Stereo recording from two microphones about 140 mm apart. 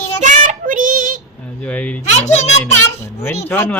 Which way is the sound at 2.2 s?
50° left (ahead or behind).